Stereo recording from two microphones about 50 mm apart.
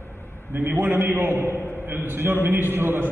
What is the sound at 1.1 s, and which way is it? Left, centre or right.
Speech, right.